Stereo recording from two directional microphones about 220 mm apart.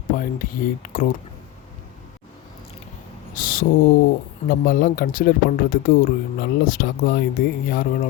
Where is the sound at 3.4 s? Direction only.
40° left (ahead or behind).